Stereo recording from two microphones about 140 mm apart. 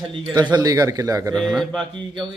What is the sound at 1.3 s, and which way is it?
Speech, centre (ahead or behind).